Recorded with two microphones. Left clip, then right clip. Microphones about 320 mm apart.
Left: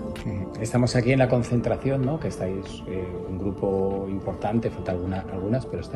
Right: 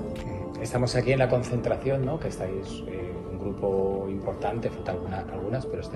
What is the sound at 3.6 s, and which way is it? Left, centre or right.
A man's voice, left.